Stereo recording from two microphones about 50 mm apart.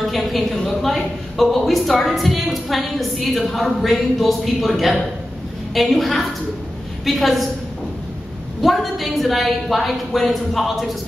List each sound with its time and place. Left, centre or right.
0.1 s a woman's voice: centre
8.5 s a woman's voice: centre